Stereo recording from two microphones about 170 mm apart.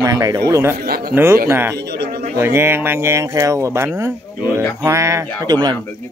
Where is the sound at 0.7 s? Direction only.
65° right (ahead or behind).